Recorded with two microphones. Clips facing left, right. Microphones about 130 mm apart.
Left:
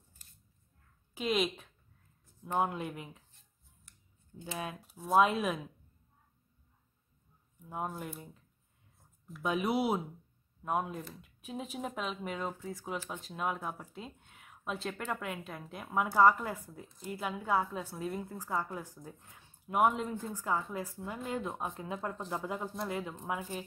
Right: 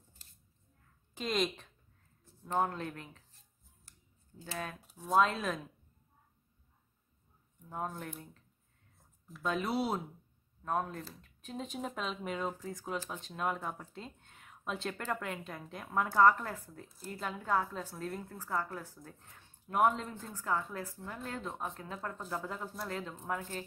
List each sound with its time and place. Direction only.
1.1 s speech: 5° left (ahead or behind)
3.9 s scissors: 35° right (ahead or behind)
4.4 s speech: 15° left (ahead or behind)
4.7 s speech: centre (ahead or behind)
7.7 s speech: 5° left (ahead or behind)
9.4 s speech: 15° left (ahead or behind)
16.8 s speech: centre (ahead or behind)